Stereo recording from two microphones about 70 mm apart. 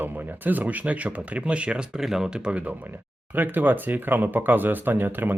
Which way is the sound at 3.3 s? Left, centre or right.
Right.